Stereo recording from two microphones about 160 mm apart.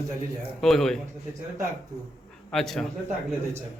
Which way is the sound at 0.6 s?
Centre (ahead or behind).